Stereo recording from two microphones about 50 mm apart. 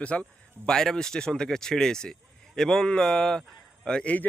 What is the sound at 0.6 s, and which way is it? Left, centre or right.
Speech, centre.